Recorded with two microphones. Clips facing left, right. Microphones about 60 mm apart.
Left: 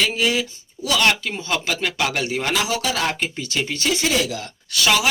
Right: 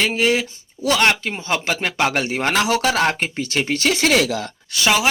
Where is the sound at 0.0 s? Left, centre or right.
Right.